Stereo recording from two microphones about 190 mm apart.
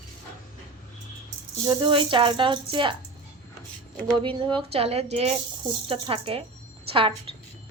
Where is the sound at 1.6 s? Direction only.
25° right (ahead or behind).